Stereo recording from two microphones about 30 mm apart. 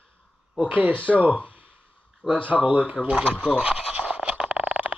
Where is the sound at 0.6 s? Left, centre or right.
Right.